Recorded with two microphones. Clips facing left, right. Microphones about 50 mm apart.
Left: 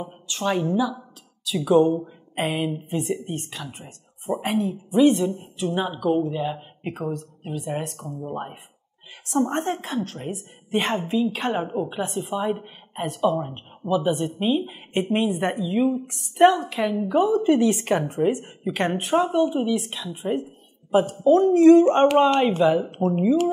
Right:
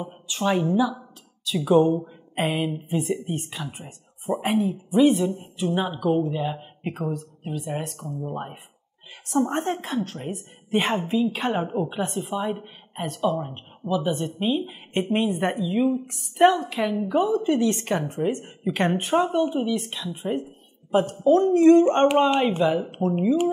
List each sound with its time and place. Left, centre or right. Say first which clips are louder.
0.0 s speech: right 1 dB; centre